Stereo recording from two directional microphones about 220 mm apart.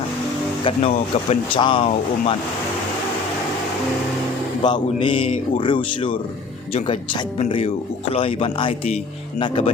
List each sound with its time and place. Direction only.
0.6 s speech: 25° left (ahead or behind)
4.6 s speech: 20° left (ahead or behind)
7.3 s speech: 30° left (ahead or behind)